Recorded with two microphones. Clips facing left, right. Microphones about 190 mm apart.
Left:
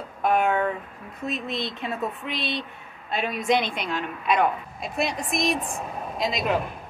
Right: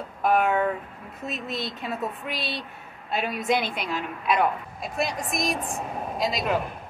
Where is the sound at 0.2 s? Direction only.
5° right (ahead or behind).